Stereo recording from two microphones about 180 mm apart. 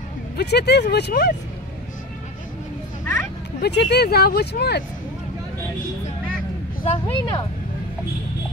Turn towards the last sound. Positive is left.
turn(degrees=30)  # may be behind; listen again after turning